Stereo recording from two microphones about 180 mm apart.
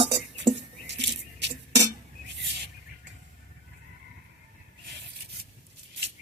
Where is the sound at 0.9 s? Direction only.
75° right (ahead or behind).